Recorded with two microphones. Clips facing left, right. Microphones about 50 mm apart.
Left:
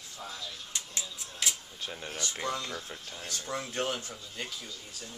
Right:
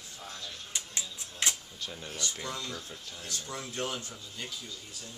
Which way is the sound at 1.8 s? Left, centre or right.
Left.